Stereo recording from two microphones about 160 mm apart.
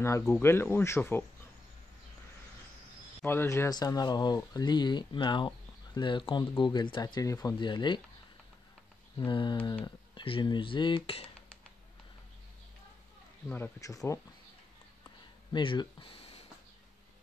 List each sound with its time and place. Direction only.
0.3 s speech: 15° left (ahead or behind)
3.2 s speech: 15° left (ahead or behind); by 8.0 s 30° left (ahead or behind)
9.2 s speech: 30° left (ahead or behind)
13.5 s speech: 15° left (ahead or behind)
15.5 s speech: 30° left (ahead or behind)